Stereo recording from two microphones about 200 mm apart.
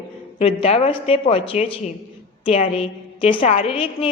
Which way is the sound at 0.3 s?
30° left (ahead or behind).